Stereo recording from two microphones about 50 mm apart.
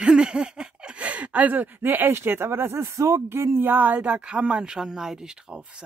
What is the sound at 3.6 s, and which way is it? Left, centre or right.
Speech, right.